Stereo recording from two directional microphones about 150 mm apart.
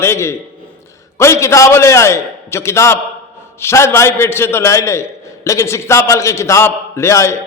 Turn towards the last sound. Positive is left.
turn(degrees=20)  # may be behind; listen again after turning